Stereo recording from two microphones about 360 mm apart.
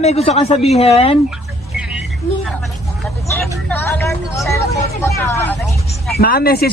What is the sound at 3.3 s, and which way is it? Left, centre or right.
Vehicle, centre.